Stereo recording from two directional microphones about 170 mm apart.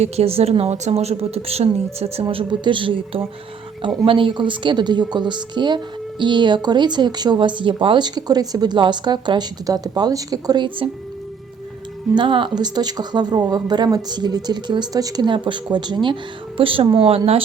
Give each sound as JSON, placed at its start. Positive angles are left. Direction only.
{"t": 0.0, "sound": "a woman's voice", "side_deg": -35}
{"t": 12.1, "sound": "a woman's voice", "side_deg": -30}